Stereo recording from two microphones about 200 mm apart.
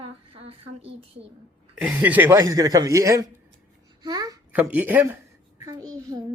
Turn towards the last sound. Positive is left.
turn(degrees=-20)  # may be behind; listen again after turning